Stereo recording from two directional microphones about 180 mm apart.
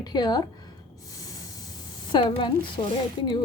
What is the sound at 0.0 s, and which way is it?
Speech, 20° left (ahead or behind).